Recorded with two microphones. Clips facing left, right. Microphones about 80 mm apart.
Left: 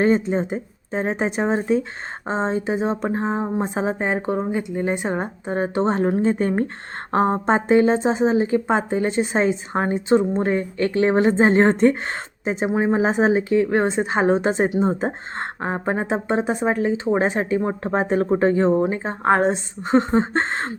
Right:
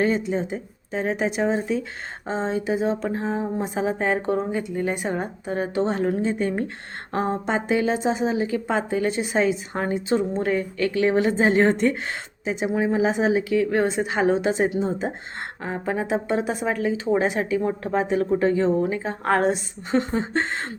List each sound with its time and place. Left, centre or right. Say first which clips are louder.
0.0 s a woman's voice: left 4 dB; left
3.9 s a woman's voice: even; left
19.8 s a woman's voice: left 6 dB; left